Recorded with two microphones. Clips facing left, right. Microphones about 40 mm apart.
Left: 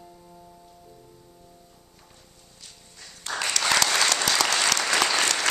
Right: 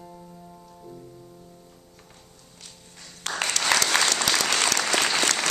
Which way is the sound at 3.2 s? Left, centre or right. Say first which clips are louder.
Even; right.